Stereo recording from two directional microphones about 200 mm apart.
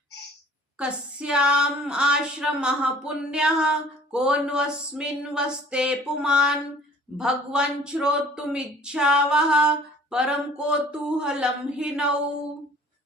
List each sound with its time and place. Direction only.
0.8 s a woman's voice: 5° right (ahead or behind)